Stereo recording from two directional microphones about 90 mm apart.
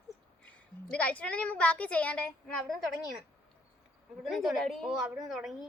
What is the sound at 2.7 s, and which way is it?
Speech, centre (ahead or behind).